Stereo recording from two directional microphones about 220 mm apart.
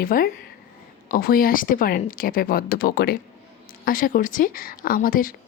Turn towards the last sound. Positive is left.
turn(degrees=40)  # may be behind; listen again after turning